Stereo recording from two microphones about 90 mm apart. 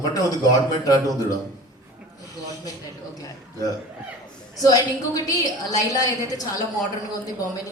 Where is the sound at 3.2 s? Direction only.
40° left (ahead or behind).